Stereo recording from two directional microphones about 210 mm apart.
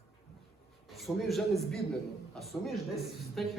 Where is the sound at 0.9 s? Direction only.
Centre (ahead or behind).